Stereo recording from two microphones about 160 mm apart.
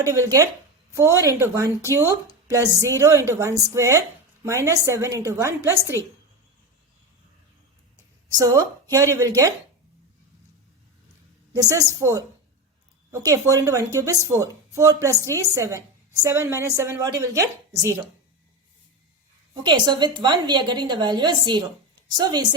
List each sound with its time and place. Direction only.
0.0 s a woman's voice: 20° right (ahead or behind)
8.4 s a woman's voice: 20° right (ahead or behind)
11.5 s a woman's voice: 20° right (ahead or behind)
19.6 s a woman's voice: 30° right (ahead or behind)